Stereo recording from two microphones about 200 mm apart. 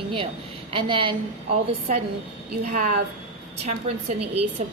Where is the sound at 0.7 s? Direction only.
25° right (ahead or behind).